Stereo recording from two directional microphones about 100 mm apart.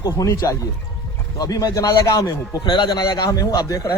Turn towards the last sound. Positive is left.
turn(degrees=35)  # may be behind; listen again after turning